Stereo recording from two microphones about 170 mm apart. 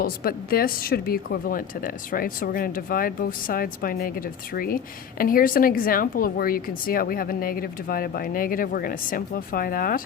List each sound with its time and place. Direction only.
0.0 s a woman's voice: 60° left (ahead or behind)